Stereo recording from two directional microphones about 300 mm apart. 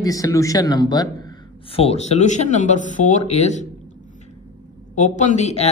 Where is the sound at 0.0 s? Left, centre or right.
Centre.